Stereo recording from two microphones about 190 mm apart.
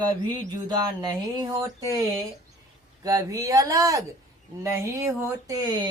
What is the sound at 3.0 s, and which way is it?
Speech, 20° right (ahead or behind).